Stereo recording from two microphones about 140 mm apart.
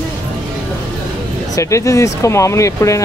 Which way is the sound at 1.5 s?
20° left (ahead or behind).